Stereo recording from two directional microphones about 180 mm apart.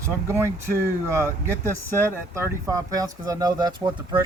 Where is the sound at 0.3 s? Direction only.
15° right (ahead or behind).